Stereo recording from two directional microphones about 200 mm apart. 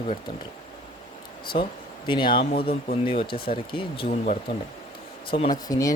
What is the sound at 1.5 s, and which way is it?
Speech, 25° left (ahead or behind).